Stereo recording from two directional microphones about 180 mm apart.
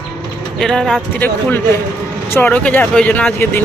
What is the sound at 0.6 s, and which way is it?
Speech, 5° left (ahead or behind).